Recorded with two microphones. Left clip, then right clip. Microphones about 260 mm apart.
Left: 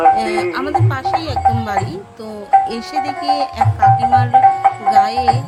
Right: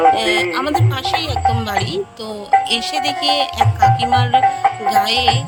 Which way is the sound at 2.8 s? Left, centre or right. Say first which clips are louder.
Right 2 dB; right.